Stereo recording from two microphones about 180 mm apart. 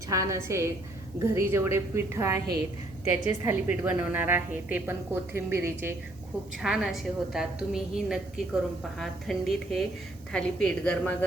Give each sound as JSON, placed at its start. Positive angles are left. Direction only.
{"t": 0.1, "sound": "a woman's voice", "side_deg": -20}
{"t": 6.6, "sound": "a woman's voice", "side_deg": 0}